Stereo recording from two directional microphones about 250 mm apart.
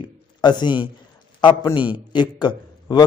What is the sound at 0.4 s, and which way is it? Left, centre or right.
A man's voice, centre.